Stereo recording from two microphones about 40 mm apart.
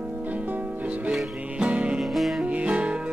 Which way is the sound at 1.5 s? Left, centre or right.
Right.